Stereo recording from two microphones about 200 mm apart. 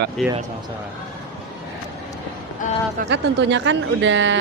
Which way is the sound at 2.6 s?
40° left (ahead or behind).